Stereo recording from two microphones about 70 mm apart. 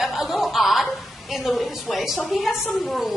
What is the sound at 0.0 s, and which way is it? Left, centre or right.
Chuckle, centre.